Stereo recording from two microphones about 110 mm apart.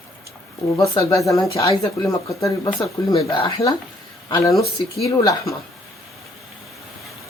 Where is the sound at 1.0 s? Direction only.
30° left (ahead or behind).